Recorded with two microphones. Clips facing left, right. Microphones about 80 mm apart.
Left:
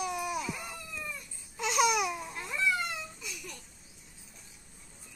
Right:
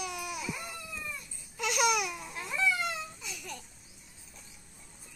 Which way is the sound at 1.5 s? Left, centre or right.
Left.